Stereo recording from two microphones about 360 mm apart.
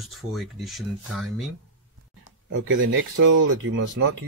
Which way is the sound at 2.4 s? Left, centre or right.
Right.